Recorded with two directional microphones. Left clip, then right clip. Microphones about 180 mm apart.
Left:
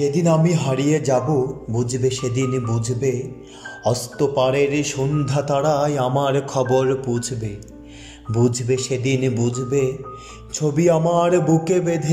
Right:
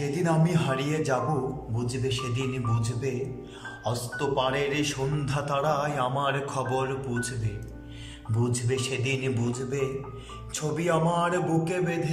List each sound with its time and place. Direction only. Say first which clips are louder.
0.0 s speech: left 9 dB; 20° left (ahead or behind)
8.4 s speech: left 9 dB; 30° left (ahead or behind)
10.5 s music: left 9 dB; 30° left (ahead or behind)